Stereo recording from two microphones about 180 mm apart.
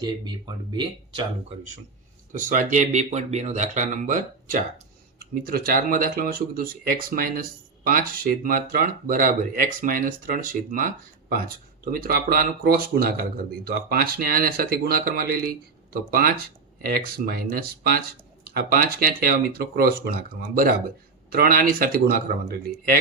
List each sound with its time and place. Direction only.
0.0 s speech: 25° right (ahead or behind)
2.3 s speech: 45° right (ahead or behind)
21.2 s speech: 55° right (ahead or behind)